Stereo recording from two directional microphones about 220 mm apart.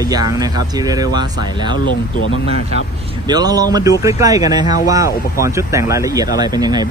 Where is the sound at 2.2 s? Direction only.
60° left (ahead or behind).